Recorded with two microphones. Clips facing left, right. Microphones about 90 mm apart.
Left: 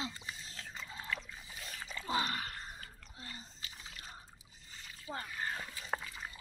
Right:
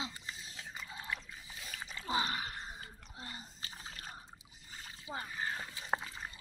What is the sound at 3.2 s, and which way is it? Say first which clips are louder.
Splash: right 1 dB; 40° right (ahead or behind).